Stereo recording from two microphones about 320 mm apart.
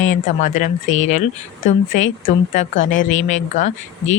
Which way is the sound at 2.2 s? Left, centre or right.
Left.